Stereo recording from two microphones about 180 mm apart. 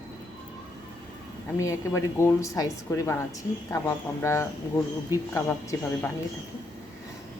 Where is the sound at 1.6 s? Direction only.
15° left (ahead or behind).